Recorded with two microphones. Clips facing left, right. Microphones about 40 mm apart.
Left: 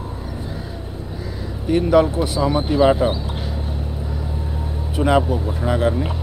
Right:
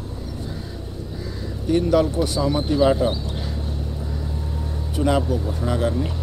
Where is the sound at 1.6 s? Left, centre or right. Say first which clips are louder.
Left 3 dB; left.